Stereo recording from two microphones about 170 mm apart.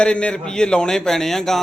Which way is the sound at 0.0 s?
5° left (ahead or behind).